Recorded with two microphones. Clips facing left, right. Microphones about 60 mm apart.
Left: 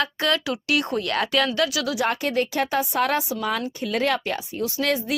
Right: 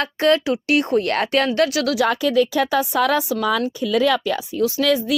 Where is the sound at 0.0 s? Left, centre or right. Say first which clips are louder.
Right 6 dB; right.